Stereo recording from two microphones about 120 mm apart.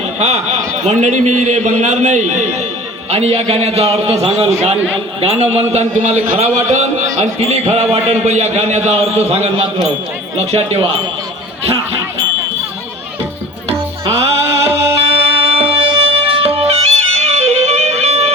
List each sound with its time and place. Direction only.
0.2 s a man's voice: 65° right (ahead or behind)
3.1 s a man's voice: 60° right (ahead or behind)
14.0 s music: 55° right (ahead or behind)